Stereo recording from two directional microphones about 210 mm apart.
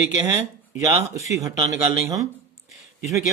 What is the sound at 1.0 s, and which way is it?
Speech, 15° right (ahead or behind).